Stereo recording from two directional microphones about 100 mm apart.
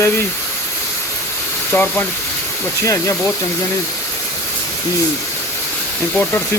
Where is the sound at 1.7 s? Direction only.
15° left (ahead or behind).